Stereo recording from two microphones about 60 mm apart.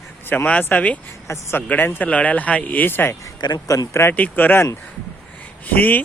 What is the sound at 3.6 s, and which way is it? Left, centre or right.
Speech, left.